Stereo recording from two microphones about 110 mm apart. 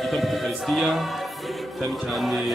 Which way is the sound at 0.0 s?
Centre (ahead or behind).